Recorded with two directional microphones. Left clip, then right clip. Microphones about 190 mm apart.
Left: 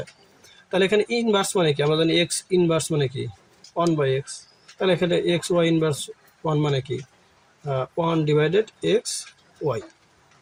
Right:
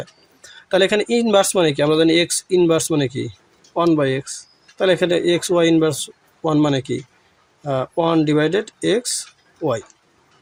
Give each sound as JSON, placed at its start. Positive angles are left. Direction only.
{"t": 0.7, "sound": "speech", "side_deg": -45}